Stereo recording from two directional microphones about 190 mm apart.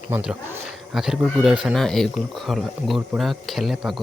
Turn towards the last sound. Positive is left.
turn(degrees=0)  # may be behind; listen again after turning